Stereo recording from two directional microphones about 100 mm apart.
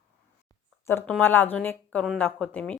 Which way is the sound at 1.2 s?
20° left (ahead or behind).